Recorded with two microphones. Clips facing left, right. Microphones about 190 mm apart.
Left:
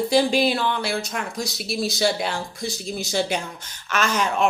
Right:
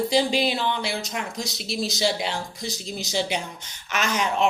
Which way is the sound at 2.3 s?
20° right (ahead or behind).